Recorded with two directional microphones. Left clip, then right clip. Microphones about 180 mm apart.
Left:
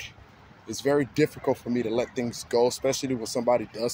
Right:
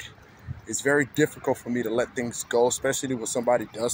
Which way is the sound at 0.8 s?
20° left (ahead or behind).